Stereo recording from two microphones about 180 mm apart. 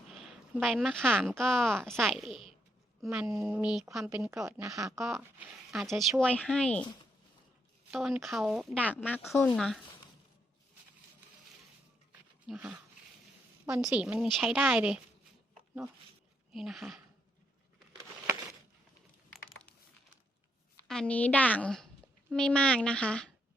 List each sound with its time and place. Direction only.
0.1 s a sound: centre (ahead or behind)
1.1 s speech: centre (ahead or behind); by 4.9 s 15° right (ahead or behind)
4.9 s speech: centre (ahead or behind)
7.9 s a woman's voice: 5° right (ahead or behind)
12.5 s speech: 5° right (ahead or behind)
13.9 s speech: 5° right (ahead or behind)
16.5 s speech: centre (ahead or behind)
20.7 s a woman's voice: 5° left (ahead or behind)